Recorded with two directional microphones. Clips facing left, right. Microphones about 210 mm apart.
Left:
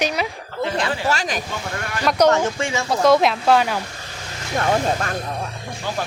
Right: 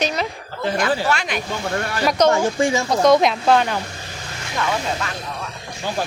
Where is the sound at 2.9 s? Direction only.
5° left (ahead or behind).